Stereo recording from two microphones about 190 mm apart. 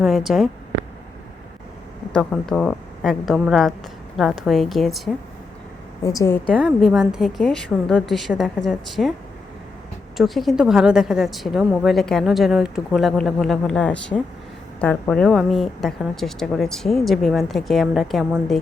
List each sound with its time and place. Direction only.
0.0 s a woman's voice: centre (ahead or behind)
2.1 s a woman's voice: 5° left (ahead or behind)
6.0 s a woman's voice: 15° left (ahead or behind)
6.5 s a woman's voice: 5° left (ahead or behind)
10.2 s a woman's voice: centre (ahead or behind)